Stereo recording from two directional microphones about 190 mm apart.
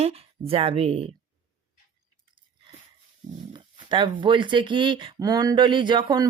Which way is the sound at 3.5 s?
25° right (ahead or behind).